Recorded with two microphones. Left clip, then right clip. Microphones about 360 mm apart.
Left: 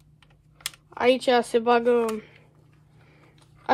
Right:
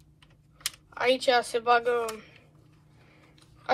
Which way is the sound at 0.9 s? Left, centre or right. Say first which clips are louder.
Left 3 dB; left.